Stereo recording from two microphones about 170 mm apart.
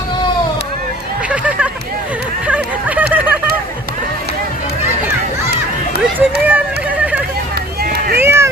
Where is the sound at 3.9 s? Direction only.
70° right (ahead or behind).